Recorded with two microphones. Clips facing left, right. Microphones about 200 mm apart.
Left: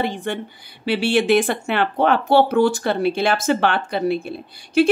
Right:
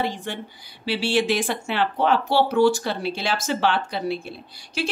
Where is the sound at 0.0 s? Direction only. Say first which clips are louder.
Left 4 dB; 60° left (ahead or behind).